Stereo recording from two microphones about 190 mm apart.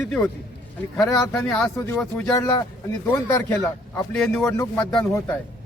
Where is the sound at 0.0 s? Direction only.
5° left (ahead or behind).